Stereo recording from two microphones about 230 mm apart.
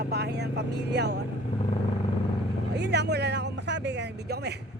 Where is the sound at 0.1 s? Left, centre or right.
Right.